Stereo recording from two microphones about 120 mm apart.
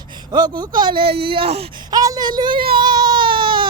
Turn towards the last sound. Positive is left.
turn(degrees=-40)  # may be behind; listen again after turning